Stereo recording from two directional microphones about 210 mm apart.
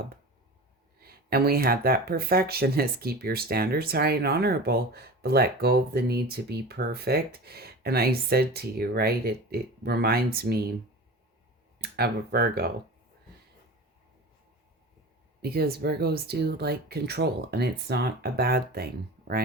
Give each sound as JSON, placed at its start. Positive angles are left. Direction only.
{"t": 1.0, "sound": "speech", "side_deg": -45}
{"t": 11.8, "sound": "speech", "side_deg": -45}
{"t": 15.4, "sound": "speech", "side_deg": -50}